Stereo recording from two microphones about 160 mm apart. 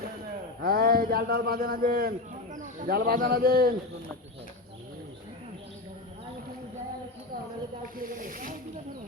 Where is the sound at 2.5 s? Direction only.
55° right (ahead or behind).